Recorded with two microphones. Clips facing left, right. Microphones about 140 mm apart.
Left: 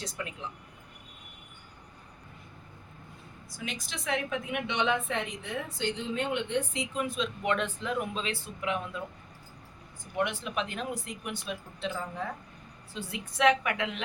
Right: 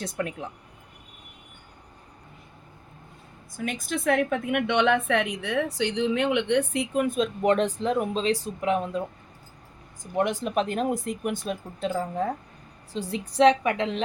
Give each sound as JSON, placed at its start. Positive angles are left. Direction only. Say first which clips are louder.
{"t": 0.0, "sound": "speech", "louder": "right 7 dB", "side_deg": -55}
{"t": 3.6, "sound": "a woman's voice", "louder": "right 10 dB", "side_deg": -50}
{"t": 10.2, "sound": "a woman's voice", "louder": "right 6 dB", "side_deg": -40}